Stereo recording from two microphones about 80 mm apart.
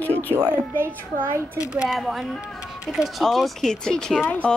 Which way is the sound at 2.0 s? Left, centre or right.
Centre.